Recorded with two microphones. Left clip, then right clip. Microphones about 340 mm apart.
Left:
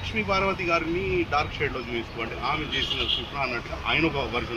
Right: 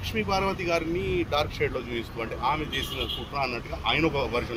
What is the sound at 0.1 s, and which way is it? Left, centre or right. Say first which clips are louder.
Speech: left 2 dB; centre.